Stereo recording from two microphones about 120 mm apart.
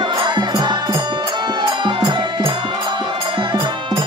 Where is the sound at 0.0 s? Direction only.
40° right (ahead or behind).